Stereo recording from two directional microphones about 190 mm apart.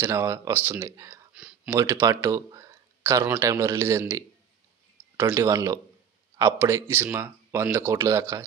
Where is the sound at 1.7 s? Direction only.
15° right (ahead or behind).